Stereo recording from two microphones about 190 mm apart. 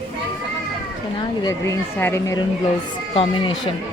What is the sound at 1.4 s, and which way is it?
Speech, 15° left (ahead or behind).